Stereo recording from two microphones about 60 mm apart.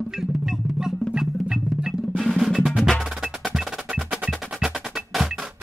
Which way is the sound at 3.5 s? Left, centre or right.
Centre.